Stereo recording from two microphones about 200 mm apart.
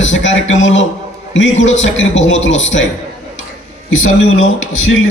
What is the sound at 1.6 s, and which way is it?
A man's voice, 70° left (ahead or behind).